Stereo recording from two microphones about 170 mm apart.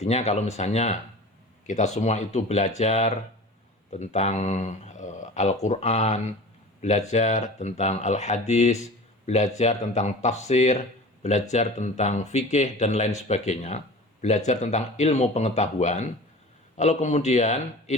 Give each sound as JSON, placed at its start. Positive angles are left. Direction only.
{"t": 0.0, "sound": "a man's voice", "side_deg": 40}